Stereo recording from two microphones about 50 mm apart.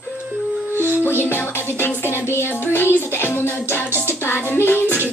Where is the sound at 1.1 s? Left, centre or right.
Left.